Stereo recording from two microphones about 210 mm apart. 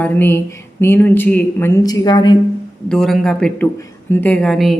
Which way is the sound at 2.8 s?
Centre (ahead or behind).